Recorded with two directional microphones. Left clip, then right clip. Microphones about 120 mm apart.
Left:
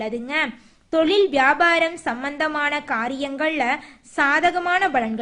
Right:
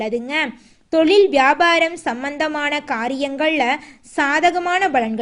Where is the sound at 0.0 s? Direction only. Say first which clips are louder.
Right 3 dB; 35° right (ahead or behind).